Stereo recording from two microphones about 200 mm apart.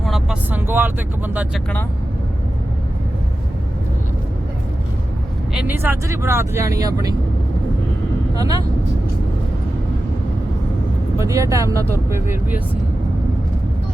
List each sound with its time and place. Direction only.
0.0 s speech: centre (ahead or behind)
5.5 s speech: 10° right (ahead or behind)
8.4 s speech: 15° right (ahead or behind)
11.2 s speech: 15° right (ahead or behind)